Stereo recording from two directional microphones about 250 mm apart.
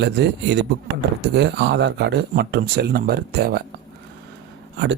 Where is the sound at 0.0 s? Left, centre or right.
Right.